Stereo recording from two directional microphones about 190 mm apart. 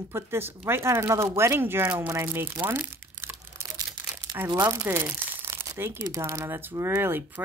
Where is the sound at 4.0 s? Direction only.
15° right (ahead or behind).